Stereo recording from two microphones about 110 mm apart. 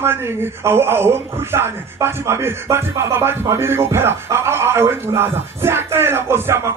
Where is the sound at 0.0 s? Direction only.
20° right (ahead or behind).